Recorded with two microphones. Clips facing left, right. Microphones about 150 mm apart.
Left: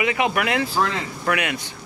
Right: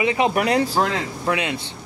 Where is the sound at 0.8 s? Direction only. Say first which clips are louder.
Right 1 dB; 25° right (ahead or behind).